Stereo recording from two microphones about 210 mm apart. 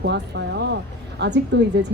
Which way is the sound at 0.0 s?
55° right (ahead or behind).